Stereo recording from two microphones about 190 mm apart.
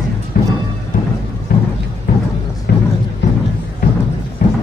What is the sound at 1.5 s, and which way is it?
Music, 50° left (ahead or behind).